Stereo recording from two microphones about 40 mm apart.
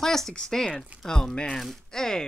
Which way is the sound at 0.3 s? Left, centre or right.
Left.